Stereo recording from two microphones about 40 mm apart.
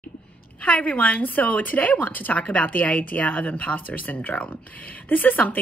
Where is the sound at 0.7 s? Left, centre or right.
Left.